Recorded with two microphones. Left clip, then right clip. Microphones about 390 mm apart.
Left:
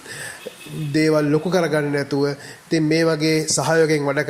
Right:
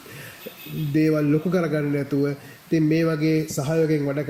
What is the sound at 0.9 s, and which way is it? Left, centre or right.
Mantra, centre.